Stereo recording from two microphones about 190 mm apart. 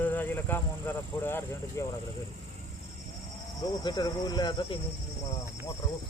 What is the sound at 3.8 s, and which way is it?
Speech, 20° left (ahead or behind).